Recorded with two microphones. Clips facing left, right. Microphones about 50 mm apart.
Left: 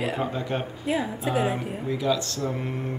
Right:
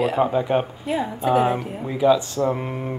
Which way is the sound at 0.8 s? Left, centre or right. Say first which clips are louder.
Right 4 dB; centre.